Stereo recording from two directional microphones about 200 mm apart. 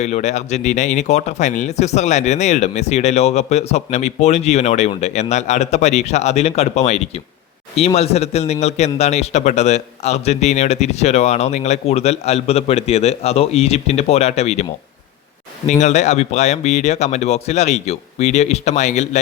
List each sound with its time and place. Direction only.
0.0 s speech: 35° left (ahead or behind)